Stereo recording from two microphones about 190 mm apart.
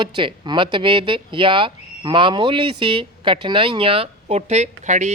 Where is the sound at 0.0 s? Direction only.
25° right (ahead or behind).